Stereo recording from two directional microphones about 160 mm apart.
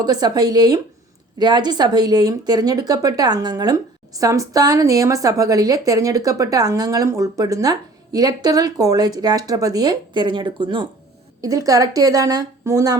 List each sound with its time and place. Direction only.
0.0 s speech: 25° right (ahead or behind)